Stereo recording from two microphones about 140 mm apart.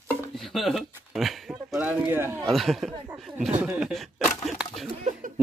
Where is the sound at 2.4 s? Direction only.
Centre (ahead or behind).